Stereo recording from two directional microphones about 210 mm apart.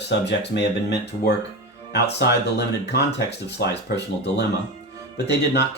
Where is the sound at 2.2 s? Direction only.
55° left (ahead or behind).